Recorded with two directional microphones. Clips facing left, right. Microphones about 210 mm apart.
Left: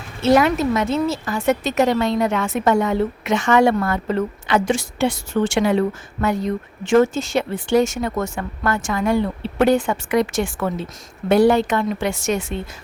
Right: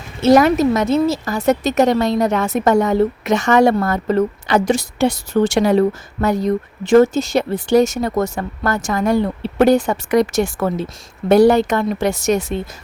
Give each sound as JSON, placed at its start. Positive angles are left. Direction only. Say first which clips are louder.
{"t": 0.2, "sound": "a woman's voice", "louder": "right 4 dB", "side_deg": -40}